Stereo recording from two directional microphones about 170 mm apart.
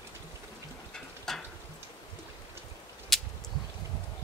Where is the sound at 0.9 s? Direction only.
5° left (ahead or behind).